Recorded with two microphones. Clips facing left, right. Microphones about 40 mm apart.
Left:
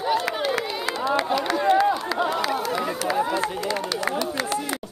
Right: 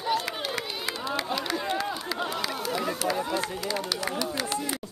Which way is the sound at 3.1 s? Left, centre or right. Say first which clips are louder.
Left 5 dB; left.